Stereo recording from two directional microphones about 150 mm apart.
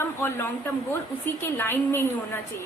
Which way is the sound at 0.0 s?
15° left (ahead or behind).